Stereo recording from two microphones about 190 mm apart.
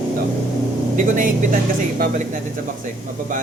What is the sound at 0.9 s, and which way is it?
Speech, 45° right (ahead or behind).